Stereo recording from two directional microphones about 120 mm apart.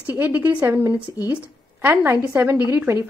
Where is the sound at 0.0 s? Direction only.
15° right (ahead or behind).